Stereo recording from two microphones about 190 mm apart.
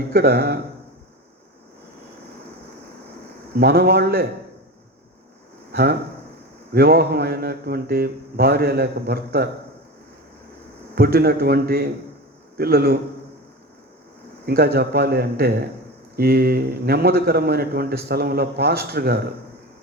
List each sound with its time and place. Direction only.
0.1 s a man's voice: 55° right (ahead or behind)
3.6 s a man's voice: 55° right (ahead or behind)
5.7 s a man's voice: 55° right (ahead or behind)
10.9 s a man's voice: 55° right (ahead or behind)
14.4 s a man's voice: 55° right (ahead or behind)